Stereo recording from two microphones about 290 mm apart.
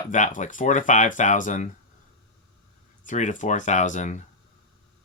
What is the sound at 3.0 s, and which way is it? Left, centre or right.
Speech, left.